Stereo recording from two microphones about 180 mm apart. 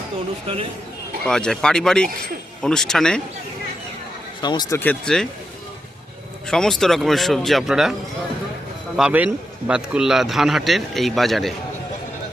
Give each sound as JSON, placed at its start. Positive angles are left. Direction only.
{"t": 1.3, "sound": "a man's voice", "side_deg": 5}
{"t": 4.4, "sound": "speech", "side_deg": 25}
{"t": 4.8, "sound": "a man's voice", "side_deg": 5}
{"t": 6.5, "sound": "a man's voice", "side_deg": 0}
{"t": 9.0, "sound": "a man's voice", "side_deg": -5}